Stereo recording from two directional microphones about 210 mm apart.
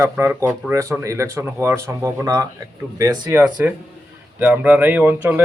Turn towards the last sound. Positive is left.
turn(degrees=-10)  # may be behind; listen again after turning